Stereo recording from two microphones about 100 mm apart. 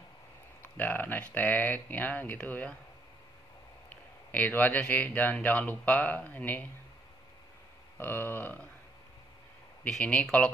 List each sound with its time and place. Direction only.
0.7 s speech: 20° left (ahead or behind)
3.9 s speech: 15° left (ahead or behind)
8.0 s speech: 20° left (ahead or behind)
9.8 s speech: 10° left (ahead or behind)